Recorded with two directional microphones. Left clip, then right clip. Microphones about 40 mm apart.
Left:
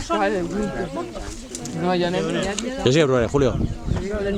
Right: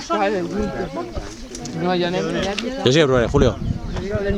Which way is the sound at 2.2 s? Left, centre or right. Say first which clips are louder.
Right 1 dB; centre.